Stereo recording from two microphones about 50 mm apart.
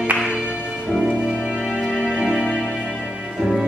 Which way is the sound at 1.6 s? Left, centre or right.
Centre.